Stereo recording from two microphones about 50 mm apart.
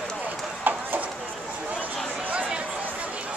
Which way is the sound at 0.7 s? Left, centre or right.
Right.